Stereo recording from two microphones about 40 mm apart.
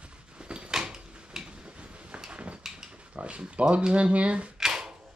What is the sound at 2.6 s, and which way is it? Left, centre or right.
Speech, centre.